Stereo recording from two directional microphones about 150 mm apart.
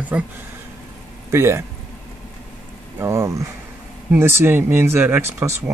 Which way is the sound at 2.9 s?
20° right (ahead or behind).